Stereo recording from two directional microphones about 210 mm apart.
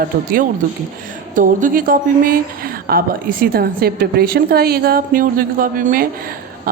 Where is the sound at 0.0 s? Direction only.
45° right (ahead or behind).